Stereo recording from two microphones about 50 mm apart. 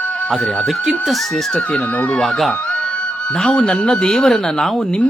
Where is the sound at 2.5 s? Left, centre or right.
Left.